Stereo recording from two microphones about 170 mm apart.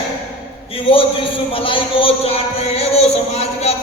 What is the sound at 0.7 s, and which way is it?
A man's voice, 35° left (ahead or behind).